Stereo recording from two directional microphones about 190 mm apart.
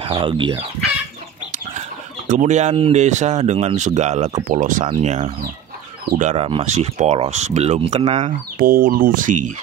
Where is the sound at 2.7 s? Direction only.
35° right (ahead or behind).